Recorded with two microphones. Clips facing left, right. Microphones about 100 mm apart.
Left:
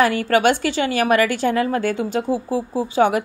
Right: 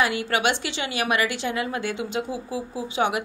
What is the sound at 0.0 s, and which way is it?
Speech, 45° left (ahead or behind).